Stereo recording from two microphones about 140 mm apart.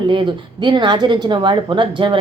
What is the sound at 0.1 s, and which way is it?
A woman's voice, 35° right (ahead or behind).